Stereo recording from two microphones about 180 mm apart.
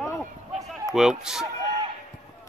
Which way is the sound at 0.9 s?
5° right (ahead or behind).